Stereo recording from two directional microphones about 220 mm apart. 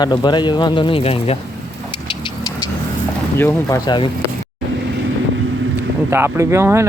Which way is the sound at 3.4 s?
10° left (ahead or behind).